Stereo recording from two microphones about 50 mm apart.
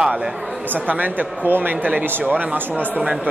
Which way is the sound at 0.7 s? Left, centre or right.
Right.